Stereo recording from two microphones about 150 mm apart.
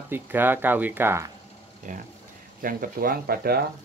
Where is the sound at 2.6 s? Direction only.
70° right (ahead or behind); by 3.6 s 90° right.